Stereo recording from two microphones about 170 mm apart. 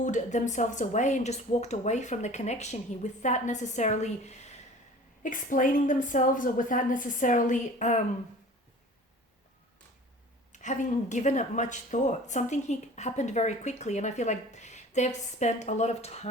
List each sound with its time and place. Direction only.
0.0 s speech: 45° left (ahead or behind)
10.5 s speech: 45° left (ahead or behind)